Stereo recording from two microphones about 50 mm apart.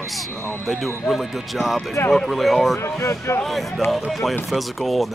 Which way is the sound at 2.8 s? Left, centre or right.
Left.